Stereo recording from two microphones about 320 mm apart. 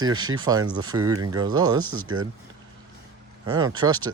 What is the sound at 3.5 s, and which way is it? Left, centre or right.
Speech, centre.